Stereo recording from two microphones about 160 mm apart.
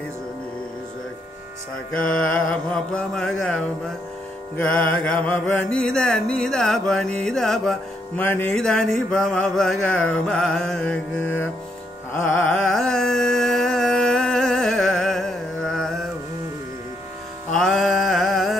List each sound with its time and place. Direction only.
2.0 s mantra: 5° left (ahead or behind)
12.4 s music: 5° left (ahead or behind)
17.5 s music: 5° left (ahead or behind)